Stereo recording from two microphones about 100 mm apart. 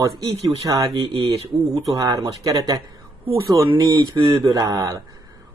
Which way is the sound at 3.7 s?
45° right (ahead or behind).